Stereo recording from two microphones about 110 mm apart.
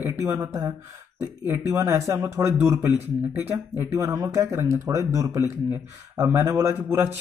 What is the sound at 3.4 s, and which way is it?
Speech, 15° right (ahead or behind).